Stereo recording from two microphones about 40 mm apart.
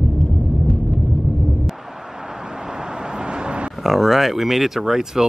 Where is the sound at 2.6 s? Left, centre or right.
Centre.